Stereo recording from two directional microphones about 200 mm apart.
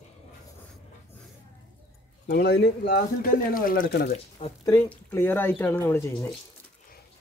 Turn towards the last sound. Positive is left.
turn(degrees=10)  # may be behind; listen again after turning